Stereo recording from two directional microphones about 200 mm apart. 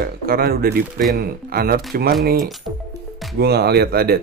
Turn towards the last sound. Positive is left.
turn(degrees=-50)  # may be behind; listen again after turning